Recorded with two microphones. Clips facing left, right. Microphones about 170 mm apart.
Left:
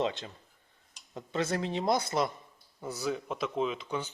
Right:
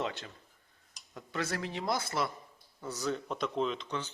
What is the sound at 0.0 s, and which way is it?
Speech, 20° left (ahead or behind).